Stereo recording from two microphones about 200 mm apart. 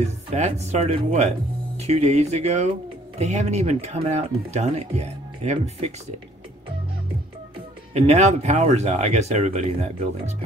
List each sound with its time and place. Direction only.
0.3 s speech: 35° right (ahead or behind)
7.9 s speech: 35° right (ahead or behind)